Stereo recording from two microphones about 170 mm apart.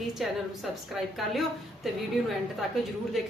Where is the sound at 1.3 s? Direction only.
Centre (ahead or behind).